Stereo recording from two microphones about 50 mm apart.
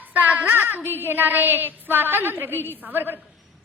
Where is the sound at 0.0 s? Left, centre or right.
Right.